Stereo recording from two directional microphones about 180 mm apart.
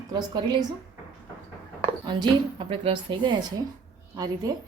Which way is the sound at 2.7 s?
30° right (ahead or behind).